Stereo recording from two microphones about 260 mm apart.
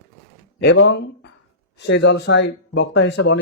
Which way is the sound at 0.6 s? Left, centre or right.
Left.